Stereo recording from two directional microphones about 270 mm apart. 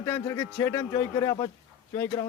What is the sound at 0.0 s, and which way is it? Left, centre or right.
A man's voice, centre.